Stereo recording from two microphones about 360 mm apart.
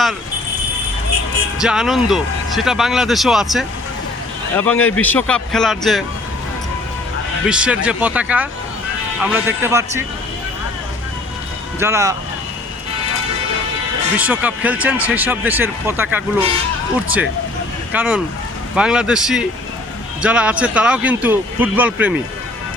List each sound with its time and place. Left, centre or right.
1.6 s speech: centre
7.4 s speech: centre
11.8 s speech: centre
14.2 s speech: centre
17.9 s speech: centre